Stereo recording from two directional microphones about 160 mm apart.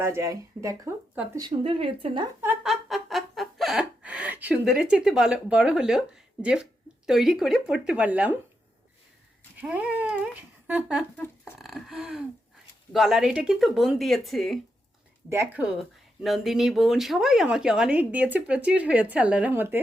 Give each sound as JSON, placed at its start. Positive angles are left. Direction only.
{"t": 0.0, "sound": "speech", "side_deg": -20}
{"t": 1.4, "sound": "speech", "side_deg": -30}
{"t": 2.6, "sound": "a sound", "side_deg": 0}
{"t": 7.1, "sound": "speech", "side_deg": 0}
{"t": 9.6, "sound": "cat", "side_deg": -10}
{"t": 11.6, "sound": "speech", "side_deg": 0}
{"t": 15.3, "sound": "cat", "side_deg": -15}
{"t": 15.6, "sound": "speech", "side_deg": 0}